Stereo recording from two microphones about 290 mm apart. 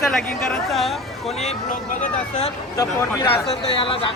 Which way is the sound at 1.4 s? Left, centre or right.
Left.